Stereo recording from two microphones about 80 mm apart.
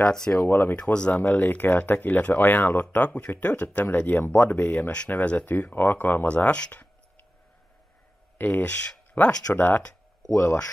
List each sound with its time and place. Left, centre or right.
0.0 s speech: centre
0.5 s speech: left
0.9 s speech: centre
8.4 s speech: left